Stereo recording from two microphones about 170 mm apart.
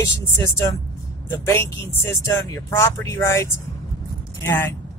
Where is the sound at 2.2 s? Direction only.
15° left (ahead or behind).